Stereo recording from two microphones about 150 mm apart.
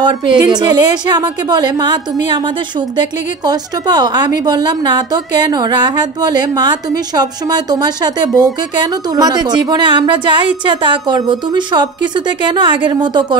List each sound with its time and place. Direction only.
0.0 s speech: 30° right (ahead or behind)